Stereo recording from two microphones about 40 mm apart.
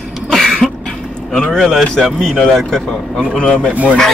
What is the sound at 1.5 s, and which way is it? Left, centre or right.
Speech, centre.